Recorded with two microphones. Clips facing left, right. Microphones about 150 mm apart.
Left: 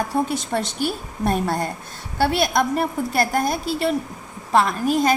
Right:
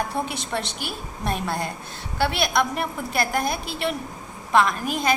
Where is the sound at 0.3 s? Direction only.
40° left (ahead or behind).